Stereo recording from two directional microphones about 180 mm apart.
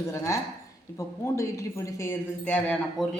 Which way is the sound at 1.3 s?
15° left (ahead or behind).